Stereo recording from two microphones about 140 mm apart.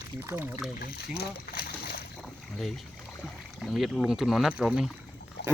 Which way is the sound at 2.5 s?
Centre (ahead or behind).